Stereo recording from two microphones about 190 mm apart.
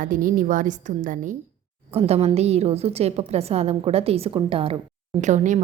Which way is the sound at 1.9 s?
30° right (ahead or behind).